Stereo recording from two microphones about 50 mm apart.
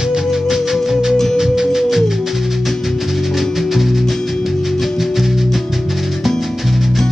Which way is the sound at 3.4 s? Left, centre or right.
Centre.